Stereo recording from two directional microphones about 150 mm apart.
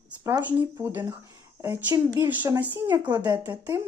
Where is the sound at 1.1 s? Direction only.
25° right (ahead or behind).